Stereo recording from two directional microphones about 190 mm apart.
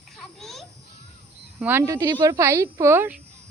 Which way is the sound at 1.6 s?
10° right (ahead or behind).